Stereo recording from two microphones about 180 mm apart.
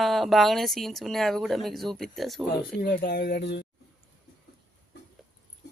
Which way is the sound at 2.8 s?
60° left (ahead or behind).